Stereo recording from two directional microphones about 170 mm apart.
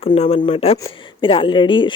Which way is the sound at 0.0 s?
35° left (ahead or behind).